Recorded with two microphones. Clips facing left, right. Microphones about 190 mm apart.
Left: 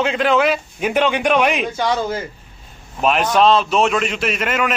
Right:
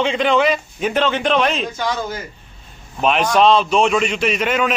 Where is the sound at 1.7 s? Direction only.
30° left (ahead or behind).